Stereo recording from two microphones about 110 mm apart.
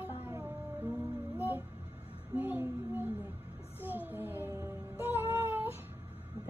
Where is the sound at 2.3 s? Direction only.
20° right (ahead or behind).